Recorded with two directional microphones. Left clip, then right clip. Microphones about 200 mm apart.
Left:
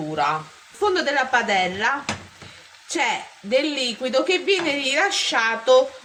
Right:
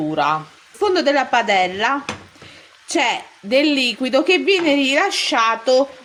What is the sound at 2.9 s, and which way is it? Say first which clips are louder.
A woman's voice: right 4 dB; 45° right (ahead or behind).